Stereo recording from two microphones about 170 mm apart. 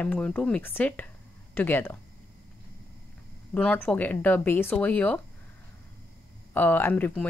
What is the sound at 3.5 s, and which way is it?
Speech, 10° left (ahead or behind).